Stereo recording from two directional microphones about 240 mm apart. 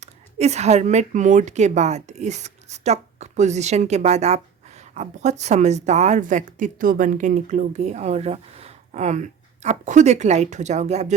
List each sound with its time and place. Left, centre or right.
0.0 s a woman's voice: right